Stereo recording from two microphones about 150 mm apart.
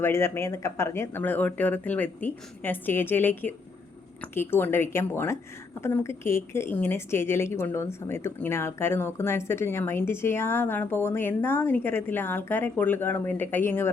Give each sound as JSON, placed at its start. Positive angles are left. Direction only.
{"t": 0.0, "sound": "a woman's voice", "side_deg": 15}